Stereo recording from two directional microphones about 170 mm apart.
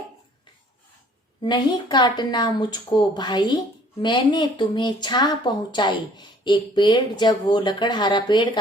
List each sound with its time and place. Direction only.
1.4 s a woman's voice: 25° left (ahead or behind)